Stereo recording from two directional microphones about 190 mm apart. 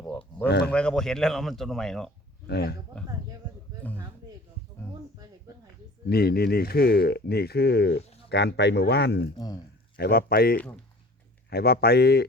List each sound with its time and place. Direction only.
0.4 s speech: 60° left (ahead or behind)
0.7 s speech: 5° left (ahead or behind)
2.5 s speech: 60° left (ahead or behind)
3.0 s speech: 5° left (ahead or behind)
6.1 s speech: 55° left (ahead or behind)